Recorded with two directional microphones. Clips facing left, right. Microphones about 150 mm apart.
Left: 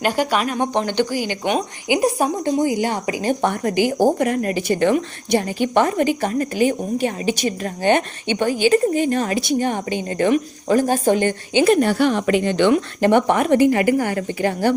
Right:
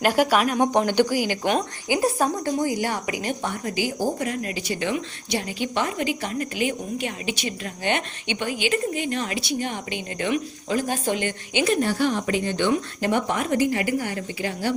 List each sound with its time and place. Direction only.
0.0 s speech: 10° right (ahead or behind)
1.9 s a woman's voice: 15° left (ahead or behind)
3.4 s speech: 60° left (ahead or behind); by 11.6 s 40° left (ahead or behind)
11.6 s a woman's voice: 65° left (ahead or behind)